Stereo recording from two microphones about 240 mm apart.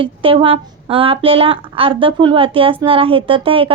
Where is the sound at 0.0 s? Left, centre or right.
Right.